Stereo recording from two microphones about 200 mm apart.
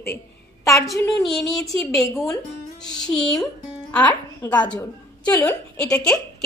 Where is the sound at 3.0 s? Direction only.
5° left (ahead or behind).